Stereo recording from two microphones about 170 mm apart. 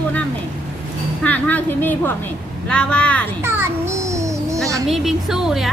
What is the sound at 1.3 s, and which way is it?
A woman's voice, 10° left (ahead or behind).